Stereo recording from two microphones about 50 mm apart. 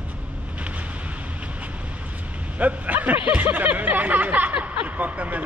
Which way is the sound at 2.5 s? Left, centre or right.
Right.